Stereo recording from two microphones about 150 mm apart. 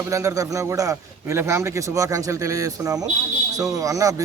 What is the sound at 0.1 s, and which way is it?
A man's voice, 20° right (ahead or behind).